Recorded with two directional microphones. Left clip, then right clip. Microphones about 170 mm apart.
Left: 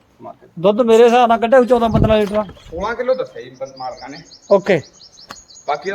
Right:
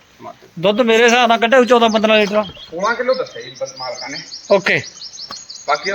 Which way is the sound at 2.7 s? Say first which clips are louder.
Right 2 dB; 30° left (ahead or behind).